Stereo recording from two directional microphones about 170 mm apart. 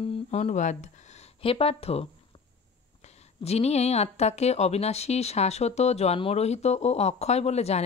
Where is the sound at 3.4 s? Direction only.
40° left (ahead or behind).